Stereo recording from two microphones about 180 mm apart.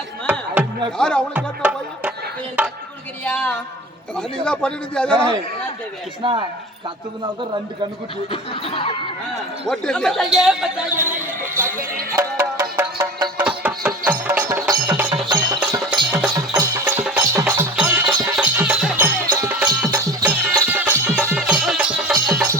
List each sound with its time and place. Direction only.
0.3 s music: 10° right (ahead or behind)
0.9 s speech: 5° left (ahead or behind)
1.3 s music: 5° right (ahead or behind)
3.2 s speech: 5° left (ahead or behind)
6.2 s speech: 30° right (ahead or behind)
8.3 s speech: 30° left (ahead or behind)
9.6 s speech: 5° left (ahead or behind)
12.1 s music: 20° right (ahead or behind)
18.1 s music: 20° right (ahead or behind)
18.3 s music: 5° right (ahead or behind)
19.5 s music: 5° right (ahead or behind)